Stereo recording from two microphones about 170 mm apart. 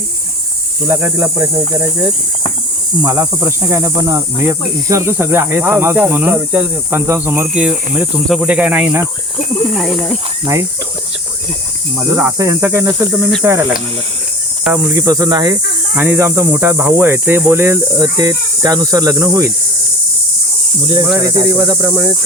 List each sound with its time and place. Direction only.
0.9 s speech: 10° right (ahead or behind)
9.7 s speech: centre (ahead or behind)
10.4 s speech: 15° right (ahead or behind)
11.9 s speech: 20° right (ahead or behind)
14.6 s cricket: 10° right (ahead or behind)
16.0 s speech: 10° right (ahead or behind)
20.8 s speech: 30° right (ahead or behind)
21.2 s speech: 20° right (ahead or behind)